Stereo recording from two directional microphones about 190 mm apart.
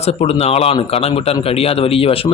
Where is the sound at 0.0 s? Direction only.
35° left (ahead or behind).